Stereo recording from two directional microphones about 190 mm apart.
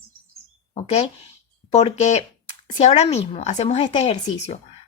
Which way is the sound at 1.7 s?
35° left (ahead or behind).